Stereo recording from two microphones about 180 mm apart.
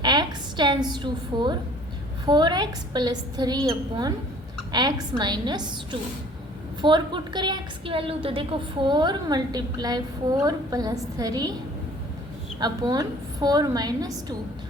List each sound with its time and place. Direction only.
0.0 s a sound: 25° right (ahead or behind)
0.9 s a woman's voice: 25° right (ahead or behind)
12.5 s a woman's voice: 20° right (ahead or behind)